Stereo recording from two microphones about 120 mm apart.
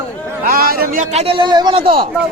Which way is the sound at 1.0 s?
65° right (ahead or behind).